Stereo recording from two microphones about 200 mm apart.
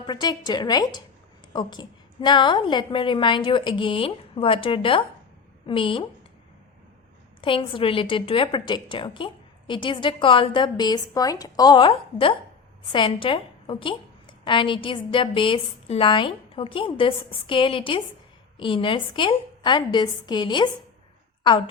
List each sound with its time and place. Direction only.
0.0 s a woman's voice: 20° left (ahead or behind)
7.4 s a woman's voice: 25° left (ahead or behind)